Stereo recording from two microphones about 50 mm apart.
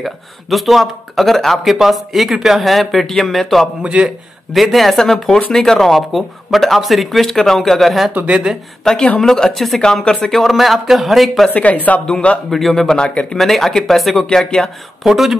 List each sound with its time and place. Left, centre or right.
0.0 s speech: centre
3.8 s a man's voice: right
4.6 s speech: centre
8.9 s speech: centre
11.5 s a woman's voice: left
12.4 s speech: centre; by 13.4 s left
13.4 s speech: centre
14.3 s speech: centre
15.0 s speech: centre